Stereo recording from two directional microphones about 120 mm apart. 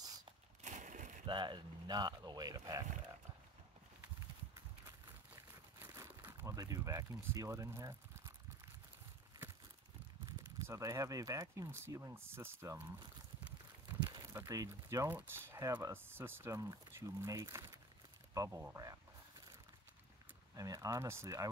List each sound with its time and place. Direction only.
0.0 s a sound: 30° right (ahead or behind)
0.6 s a sound: 80° right
1.2 s speech: 40° right (ahead or behind)
4.8 s crumpling: 20° right (ahead or behind)
10.2 s speech: 30° right (ahead or behind)
14.1 s speech: 30° right (ahead or behind)
20.5 s speech: 30° right (ahead or behind)